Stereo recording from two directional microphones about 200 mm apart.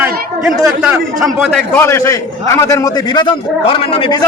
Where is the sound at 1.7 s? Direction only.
15° left (ahead or behind).